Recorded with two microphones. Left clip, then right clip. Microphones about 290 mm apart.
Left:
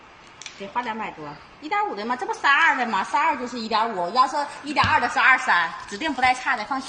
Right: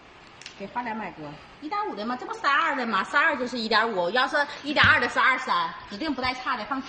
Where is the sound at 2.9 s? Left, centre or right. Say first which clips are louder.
Left 1 dB; right.